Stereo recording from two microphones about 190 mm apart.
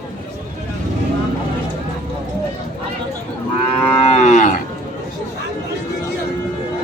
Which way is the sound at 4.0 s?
35° left (ahead or behind).